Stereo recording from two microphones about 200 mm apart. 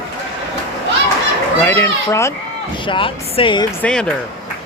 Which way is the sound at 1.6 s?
10° left (ahead or behind).